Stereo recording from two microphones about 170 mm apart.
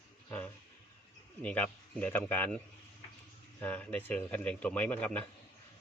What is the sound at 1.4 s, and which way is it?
Speech, 10° left (ahead or behind).